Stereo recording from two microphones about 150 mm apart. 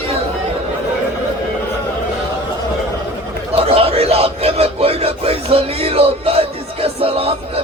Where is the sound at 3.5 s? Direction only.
40° right (ahead or behind).